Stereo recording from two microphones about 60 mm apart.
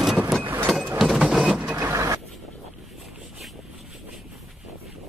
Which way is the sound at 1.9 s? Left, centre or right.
Right.